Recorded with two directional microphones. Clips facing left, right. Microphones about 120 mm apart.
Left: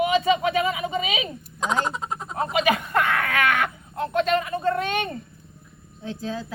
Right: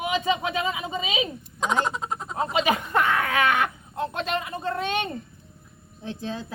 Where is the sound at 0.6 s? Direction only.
30° right (ahead or behind).